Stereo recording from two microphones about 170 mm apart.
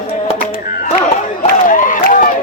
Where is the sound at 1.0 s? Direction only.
50° left (ahead or behind).